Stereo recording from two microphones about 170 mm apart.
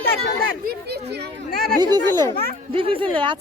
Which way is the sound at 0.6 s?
75° right (ahead or behind).